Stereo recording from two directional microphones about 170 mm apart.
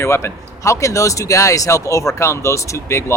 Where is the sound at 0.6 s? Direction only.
20° left (ahead or behind).